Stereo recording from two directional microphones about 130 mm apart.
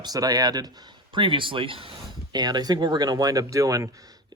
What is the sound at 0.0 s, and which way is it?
Speech, 30° right (ahead or behind).